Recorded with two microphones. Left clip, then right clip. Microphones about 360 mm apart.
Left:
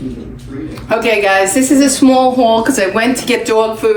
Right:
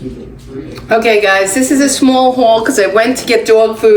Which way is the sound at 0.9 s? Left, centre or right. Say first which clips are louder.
Right 2 dB; left.